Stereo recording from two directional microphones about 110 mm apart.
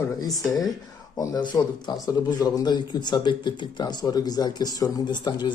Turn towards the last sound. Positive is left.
turn(degrees=40)  # may be behind; listen again after turning